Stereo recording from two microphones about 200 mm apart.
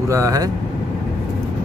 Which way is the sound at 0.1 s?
15° right (ahead or behind).